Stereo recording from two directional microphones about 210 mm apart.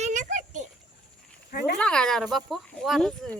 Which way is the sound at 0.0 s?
35° right (ahead or behind).